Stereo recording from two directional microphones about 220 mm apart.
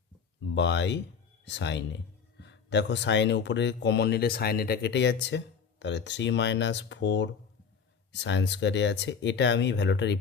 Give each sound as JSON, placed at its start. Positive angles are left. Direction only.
{"t": 0.4, "sound": "speech", "side_deg": 55}